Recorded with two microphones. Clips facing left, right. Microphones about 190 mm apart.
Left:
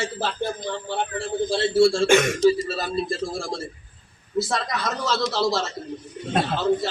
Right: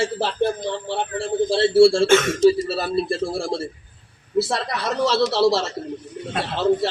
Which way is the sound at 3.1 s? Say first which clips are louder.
Right 4 dB; 30° right (ahead or behind).